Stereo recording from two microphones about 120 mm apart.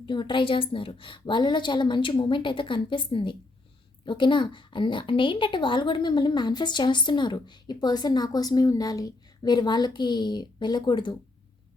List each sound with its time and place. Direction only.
0.0 s a woman's voice: 40° left (ahead or behind)